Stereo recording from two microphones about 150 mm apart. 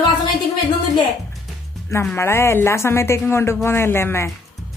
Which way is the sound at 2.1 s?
15° left (ahead or behind).